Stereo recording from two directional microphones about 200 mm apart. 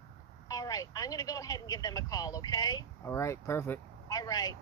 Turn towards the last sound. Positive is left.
turn(degrees=20)  # may be behind; listen again after turning